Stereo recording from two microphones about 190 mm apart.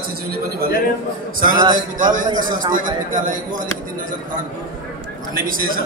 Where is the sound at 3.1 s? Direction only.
45° right (ahead or behind).